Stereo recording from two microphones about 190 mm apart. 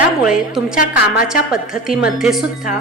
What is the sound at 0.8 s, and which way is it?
Speech, 50° left (ahead or behind).